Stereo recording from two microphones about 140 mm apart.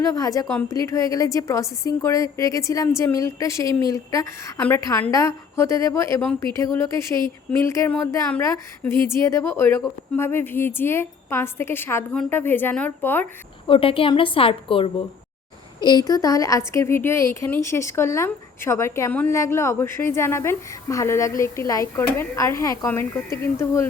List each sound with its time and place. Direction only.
0.1 s a woman's voice: 25° left (ahead or behind)
13.7 s a woman's voice: 40° left (ahead or behind); by 23.9 s 20° left (ahead or behind)